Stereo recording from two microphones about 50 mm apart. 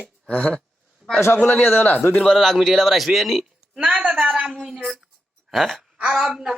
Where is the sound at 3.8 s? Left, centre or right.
Right.